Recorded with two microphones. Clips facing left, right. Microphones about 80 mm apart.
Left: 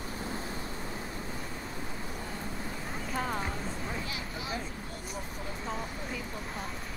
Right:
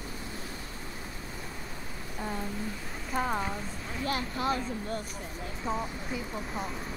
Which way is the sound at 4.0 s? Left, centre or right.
Right.